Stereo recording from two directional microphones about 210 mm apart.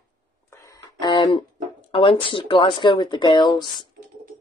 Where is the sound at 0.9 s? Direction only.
20° left (ahead or behind).